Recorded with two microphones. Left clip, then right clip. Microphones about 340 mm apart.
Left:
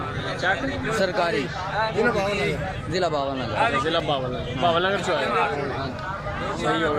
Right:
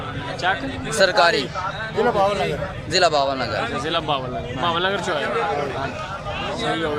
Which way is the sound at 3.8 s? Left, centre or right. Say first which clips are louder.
Right 1 dB; centre.